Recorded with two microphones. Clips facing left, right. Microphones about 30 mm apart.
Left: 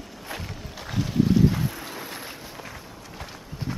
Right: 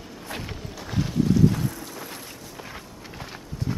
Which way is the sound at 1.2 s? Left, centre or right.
Centre.